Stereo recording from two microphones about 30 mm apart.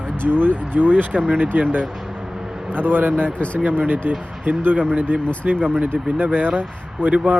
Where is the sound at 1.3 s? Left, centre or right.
Right.